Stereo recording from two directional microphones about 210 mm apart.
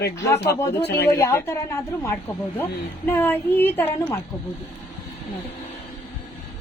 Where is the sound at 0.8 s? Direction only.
50° left (ahead or behind).